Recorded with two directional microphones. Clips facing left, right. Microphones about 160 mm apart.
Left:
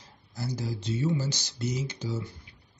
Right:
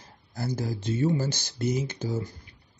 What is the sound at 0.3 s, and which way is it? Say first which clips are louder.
Speech: right 3 dB; 50° right (ahead or behind).